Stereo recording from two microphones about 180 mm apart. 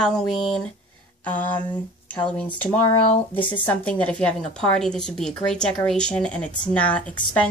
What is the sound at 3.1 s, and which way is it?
Speech, 30° left (ahead or behind).